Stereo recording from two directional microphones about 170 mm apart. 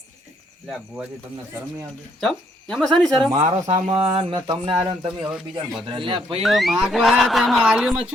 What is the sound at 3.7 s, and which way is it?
Speech, 25° right (ahead or behind).